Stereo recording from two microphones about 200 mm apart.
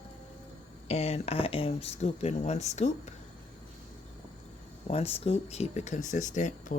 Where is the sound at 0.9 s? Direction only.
30° left (ahead or behind).